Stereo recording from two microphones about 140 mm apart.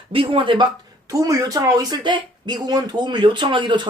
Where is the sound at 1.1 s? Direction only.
25° right (ahead or behind).